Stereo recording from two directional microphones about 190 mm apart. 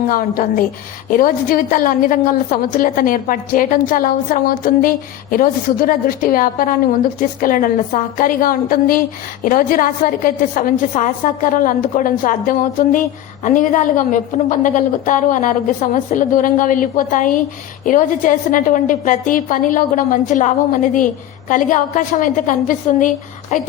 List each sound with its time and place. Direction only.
0.1 s a woman's voice: 50° left (ahead or behind)